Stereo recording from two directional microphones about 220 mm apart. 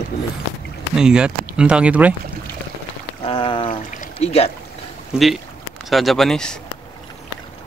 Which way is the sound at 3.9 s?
30° left (ahead or behind).